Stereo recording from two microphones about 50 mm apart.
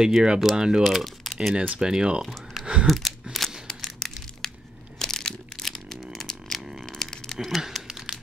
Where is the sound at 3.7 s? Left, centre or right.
Centre.